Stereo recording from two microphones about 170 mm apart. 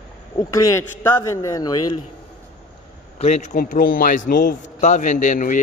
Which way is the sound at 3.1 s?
40° left (ahead or behind).